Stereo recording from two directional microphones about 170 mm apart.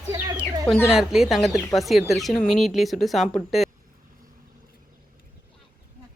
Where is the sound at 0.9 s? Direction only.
Centre (ahead or behind).